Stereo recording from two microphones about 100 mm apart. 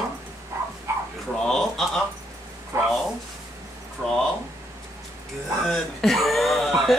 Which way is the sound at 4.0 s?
5° left (ahead or behind).